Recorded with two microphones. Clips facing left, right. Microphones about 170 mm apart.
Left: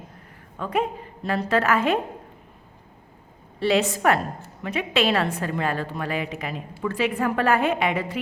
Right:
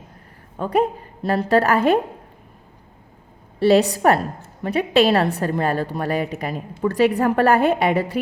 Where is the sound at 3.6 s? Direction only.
35° right (ahead or behind).